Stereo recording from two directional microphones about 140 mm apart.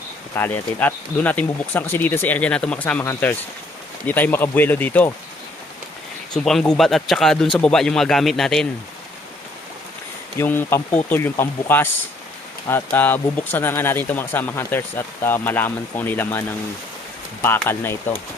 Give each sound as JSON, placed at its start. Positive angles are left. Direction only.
{"t": 0.3, "sound": "speech", "side_deg": 15}
{"t": 6.3, "sound": "speech", "side_deg": 5}
{"t": 10.3, "sound": "speech", "side_deg": 15}
{"t": 18.1, "sound": "speech", "side_deg": 10}